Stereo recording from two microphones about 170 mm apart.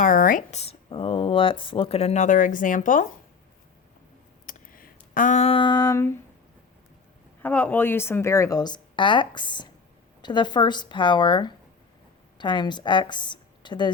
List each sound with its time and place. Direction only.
0.0 s speech: 55° left (ahead or behind)
4.4 s a sound: 55° left (ahead or behind); by 6.1 s 20° left (ahead or behind)
7.4 s a woman's voice: 10° left (ahead or behind); by 13.9 s 25° left (ahead or behind)